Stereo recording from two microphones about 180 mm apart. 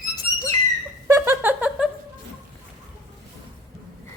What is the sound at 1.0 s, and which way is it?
Laughter, 15° right (ahead or behind).